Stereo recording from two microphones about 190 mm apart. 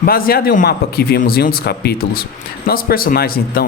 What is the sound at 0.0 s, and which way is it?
Speech, 50° left (ahead or behind).